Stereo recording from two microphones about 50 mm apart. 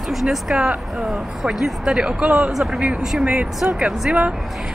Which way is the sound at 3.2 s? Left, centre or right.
Right.